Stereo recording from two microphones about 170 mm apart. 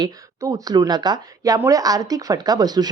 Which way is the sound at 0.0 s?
20° right (ahead or behind).